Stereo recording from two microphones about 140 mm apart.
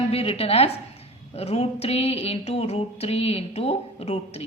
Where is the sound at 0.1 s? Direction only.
45° left (ahead or behind).